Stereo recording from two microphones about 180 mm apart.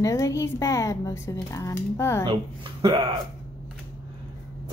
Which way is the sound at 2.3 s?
25° right (ahead or behind).